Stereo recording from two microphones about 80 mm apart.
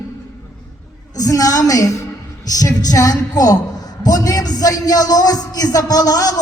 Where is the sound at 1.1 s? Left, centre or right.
Left.